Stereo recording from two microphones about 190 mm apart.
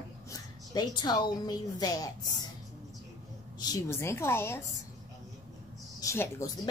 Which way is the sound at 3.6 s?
15° left (ahead or behind).